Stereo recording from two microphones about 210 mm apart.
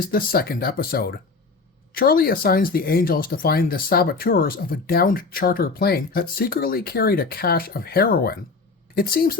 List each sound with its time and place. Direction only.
0.0 s speech: 45° left (ahead or behind)